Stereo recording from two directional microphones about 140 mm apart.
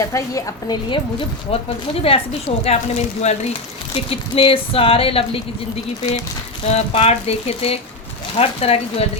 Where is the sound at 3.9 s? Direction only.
40° left (ahead or behind).